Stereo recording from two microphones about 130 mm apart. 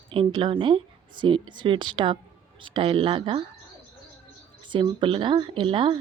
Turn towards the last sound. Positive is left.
turn(degrees=-40)  # may be behind; listen again after turning